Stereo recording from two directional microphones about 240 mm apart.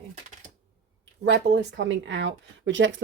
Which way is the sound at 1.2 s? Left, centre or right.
Right.